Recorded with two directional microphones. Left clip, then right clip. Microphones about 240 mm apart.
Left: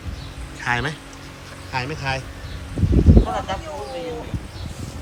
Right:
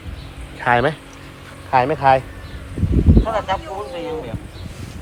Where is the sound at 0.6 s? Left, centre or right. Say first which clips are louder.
Right 7 dB; centre.